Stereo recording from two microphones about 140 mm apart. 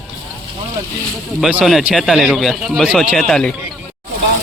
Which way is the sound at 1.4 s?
5° right (ahead or behind).